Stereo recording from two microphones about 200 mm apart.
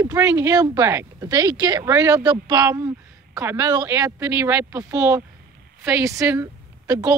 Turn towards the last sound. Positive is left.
turn(degrees=-15)  # may be behind; listen again after turning